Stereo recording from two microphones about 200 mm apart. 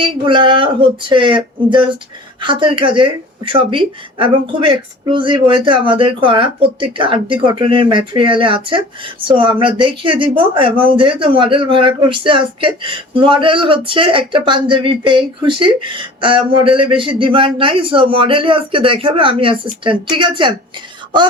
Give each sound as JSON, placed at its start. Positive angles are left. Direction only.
{"t": 0.0, "sound": "speech", "side_deg": -25}